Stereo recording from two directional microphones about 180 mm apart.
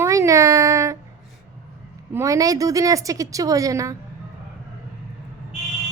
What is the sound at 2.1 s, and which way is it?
A woman's voice, 20° right (ahead or behind).